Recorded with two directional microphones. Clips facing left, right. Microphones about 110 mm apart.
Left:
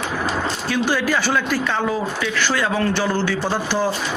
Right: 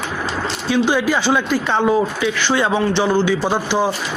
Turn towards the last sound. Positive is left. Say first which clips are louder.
# right 3 dB
turn(degrees=-15)  # may be behind; listen again after turning